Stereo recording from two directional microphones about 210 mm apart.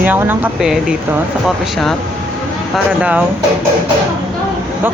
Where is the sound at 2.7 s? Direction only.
5° right (ahead or behind).